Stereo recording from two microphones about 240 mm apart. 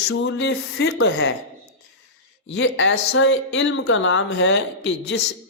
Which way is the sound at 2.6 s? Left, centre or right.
Left.